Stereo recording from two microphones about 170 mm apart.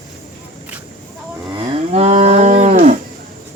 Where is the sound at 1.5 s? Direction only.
40° right (ahead or behind).